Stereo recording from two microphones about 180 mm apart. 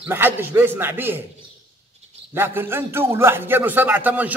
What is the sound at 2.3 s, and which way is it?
A man's voice, 10° right (ahead or behind).